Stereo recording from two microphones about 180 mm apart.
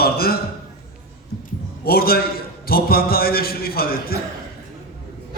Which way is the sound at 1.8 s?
55° left (ahead or behind).